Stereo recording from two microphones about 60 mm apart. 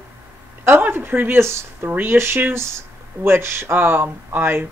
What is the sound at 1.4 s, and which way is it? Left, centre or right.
Speech, right.